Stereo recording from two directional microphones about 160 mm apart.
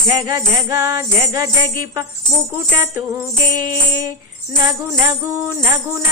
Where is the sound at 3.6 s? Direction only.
20° right (ahead or behind).